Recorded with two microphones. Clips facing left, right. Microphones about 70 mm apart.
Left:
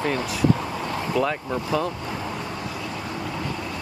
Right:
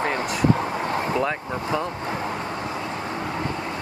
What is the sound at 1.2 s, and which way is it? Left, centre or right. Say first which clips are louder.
Speech: even; right.